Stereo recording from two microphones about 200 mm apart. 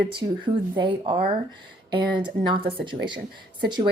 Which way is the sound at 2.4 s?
25° right (ahead or behind).